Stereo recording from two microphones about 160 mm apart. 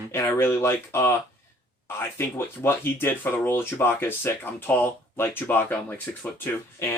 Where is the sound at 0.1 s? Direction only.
15° left (ahead or behind).